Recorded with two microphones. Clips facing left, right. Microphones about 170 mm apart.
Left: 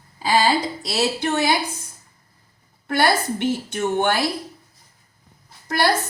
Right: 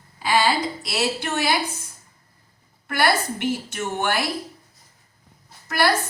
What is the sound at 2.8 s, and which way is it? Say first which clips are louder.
A woman's voice: left 2 dB; 30° left (ahead or behind).